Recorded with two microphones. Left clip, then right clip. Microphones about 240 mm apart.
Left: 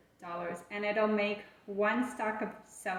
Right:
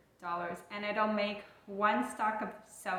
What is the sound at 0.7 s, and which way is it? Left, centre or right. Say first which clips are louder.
A woman's voice: left 3 dB; centre.